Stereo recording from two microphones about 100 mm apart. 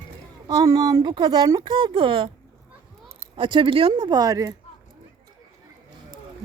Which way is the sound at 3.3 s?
55° right (ahead or behind).